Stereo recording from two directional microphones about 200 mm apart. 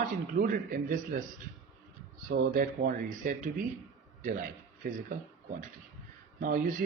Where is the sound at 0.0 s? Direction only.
40° right (ahead or behind).